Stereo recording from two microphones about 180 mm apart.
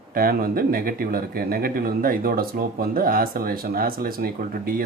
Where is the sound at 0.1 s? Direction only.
55° right (ahead or behind).